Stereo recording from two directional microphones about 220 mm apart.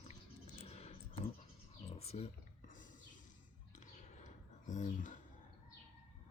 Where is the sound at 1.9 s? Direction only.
30° left (ahead or behind).